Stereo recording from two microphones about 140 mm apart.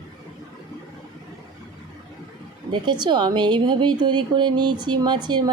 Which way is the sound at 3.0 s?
30° right (ahead or behind).